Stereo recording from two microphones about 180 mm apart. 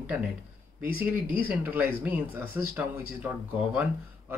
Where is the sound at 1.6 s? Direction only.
10° right (ahead or behind).